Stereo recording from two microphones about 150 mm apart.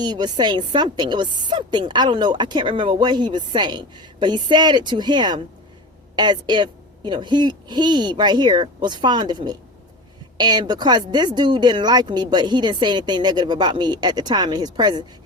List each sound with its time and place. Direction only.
0.0 s a woman's voice: 30° right (ahead or behind)